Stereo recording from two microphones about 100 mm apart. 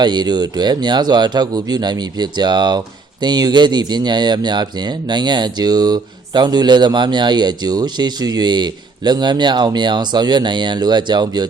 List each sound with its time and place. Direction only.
0.0 s speech: 45° right (ahead or behind)